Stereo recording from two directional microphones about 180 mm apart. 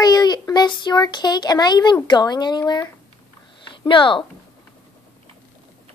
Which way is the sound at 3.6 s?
25° left (ahead or behind).